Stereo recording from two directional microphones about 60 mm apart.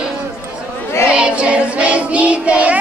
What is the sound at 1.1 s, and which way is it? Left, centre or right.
Child singing, centre.